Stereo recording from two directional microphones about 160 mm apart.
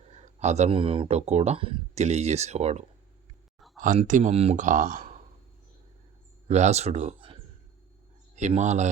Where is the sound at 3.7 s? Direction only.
55° right (ahead or behind).